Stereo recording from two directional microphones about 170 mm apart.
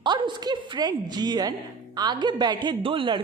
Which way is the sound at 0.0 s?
25° right (ahead or behind).